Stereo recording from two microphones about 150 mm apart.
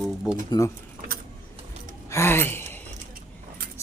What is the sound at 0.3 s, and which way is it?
Speech, 25° left (ahead or behind).